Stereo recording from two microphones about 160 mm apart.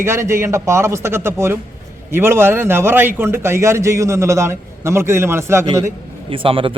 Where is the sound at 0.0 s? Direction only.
15° right (ahead or behind).